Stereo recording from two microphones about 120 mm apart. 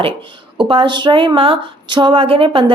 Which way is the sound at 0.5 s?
45° right (ahead or behind).